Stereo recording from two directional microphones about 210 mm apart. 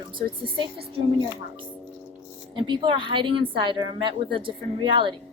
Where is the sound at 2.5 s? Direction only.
20° right (ahead or behind).